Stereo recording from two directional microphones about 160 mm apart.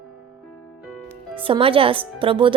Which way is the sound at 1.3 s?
35° right (ahead or behind).